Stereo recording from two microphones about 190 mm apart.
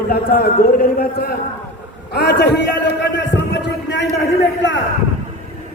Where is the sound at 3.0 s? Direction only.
65° left (ahead or behind).